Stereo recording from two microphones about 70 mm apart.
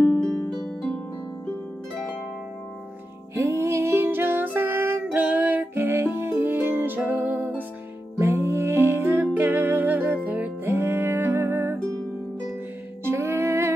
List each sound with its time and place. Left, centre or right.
0.1 s harp: centre
3.3 s music: right
5.1 s music: right
8.2 s music: right
11.9 s music: right
13.0 s music: right